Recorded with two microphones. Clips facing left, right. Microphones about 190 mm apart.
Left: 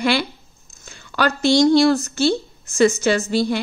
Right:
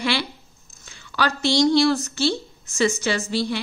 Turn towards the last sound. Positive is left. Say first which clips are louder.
# left 5 dB
turn(degrees=45)  # may be behind; listen again after turning